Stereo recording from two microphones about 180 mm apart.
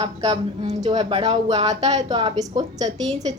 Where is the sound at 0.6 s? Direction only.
40° right (ahead or behind).